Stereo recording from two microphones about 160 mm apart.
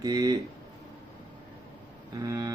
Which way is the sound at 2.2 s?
20° right (ahead or behind).